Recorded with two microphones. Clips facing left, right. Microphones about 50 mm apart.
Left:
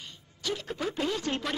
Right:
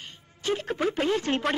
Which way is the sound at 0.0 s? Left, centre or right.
Right.